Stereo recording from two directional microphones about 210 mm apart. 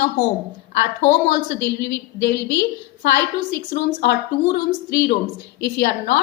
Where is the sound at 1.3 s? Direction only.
55° left (ahead or behind).